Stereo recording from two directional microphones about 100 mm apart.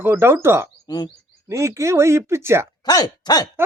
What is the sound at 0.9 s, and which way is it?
Frog, 45° left (ahead or behind).